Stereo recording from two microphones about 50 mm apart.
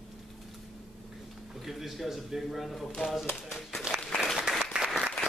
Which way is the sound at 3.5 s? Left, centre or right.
Centre.